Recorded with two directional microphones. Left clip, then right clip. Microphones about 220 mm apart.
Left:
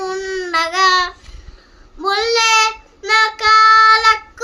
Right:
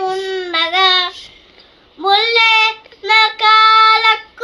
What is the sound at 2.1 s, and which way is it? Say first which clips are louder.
Child singing: right 3 dB; 50° left (ahead or behind).